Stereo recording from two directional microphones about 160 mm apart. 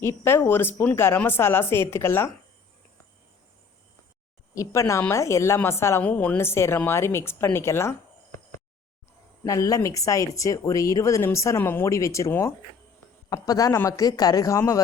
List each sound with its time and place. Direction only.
0.0 s a woman's voice: 20° left (ahead or behind)
4.5 s a woman's voice: 20° left (ahead or behind)
9.4 s speech: 20° left (ahead or behind)